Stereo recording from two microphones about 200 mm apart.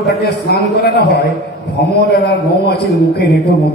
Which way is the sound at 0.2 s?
55° left (ahead or behind).